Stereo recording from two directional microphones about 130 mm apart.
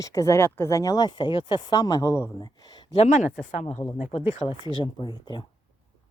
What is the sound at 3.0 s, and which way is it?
Speech, 65° left (ahead or behind).